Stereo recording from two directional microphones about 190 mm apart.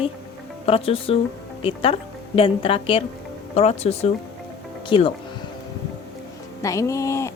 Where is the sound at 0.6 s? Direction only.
30° left (ahead or behind).